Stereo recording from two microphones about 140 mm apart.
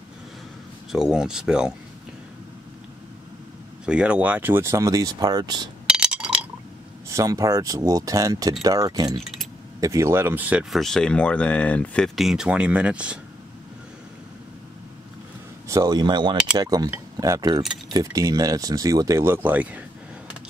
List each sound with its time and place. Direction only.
0.9 s speech: 5° right (ahead or behind)
3.8 s speech: 5° right (ahead or behind); by 5.7 s 30° right (ahead or behind)
5.9 s chink: 5° right (ahead or behind)
7.1 s speech: 20° right (ahead or behind)
15.7 s speech: 25° right (ahead or behind)